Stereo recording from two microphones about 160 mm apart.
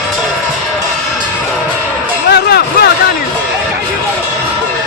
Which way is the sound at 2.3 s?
85° left.